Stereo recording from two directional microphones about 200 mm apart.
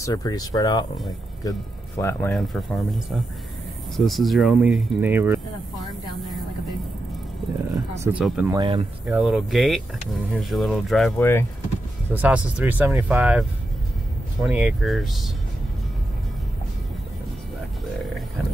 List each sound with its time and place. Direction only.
0.0 s speech: 20° left (ahead or behind)
2.3 s speech: centre (ahead or behind)
8.0 s speech: 5° right (ahead or behind)
8.5 s speech: 20° right (ahead or behind)
9.0 s speech: 5° right (ahead or behind)
11.1 s speech: 10° left (ahead or behind)
12.1 s speech: 5° right (ahead or behind)